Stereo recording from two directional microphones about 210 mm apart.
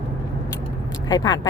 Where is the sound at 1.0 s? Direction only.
20° left (ahead or behind).